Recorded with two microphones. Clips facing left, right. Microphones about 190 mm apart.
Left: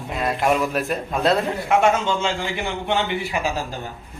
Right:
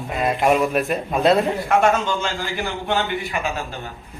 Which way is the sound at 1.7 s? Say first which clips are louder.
Left 2 dB; 20° left (ahead or behind).